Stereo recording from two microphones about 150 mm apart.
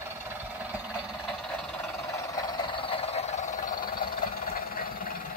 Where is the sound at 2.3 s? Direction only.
30° left (ahead or behind); by 3.8 s 55° left (ahead or behind).